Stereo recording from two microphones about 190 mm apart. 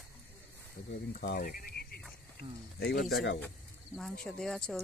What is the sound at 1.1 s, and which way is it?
Speech, 50° left (ahead or behind).